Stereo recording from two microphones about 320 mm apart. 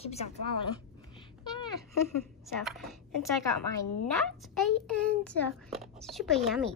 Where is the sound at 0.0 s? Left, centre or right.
Centre.